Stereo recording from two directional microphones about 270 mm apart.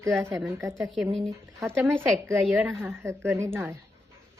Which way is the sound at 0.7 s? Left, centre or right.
Centre.